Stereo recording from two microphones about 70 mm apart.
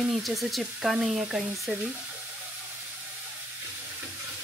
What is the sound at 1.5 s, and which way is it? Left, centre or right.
Frying, centre.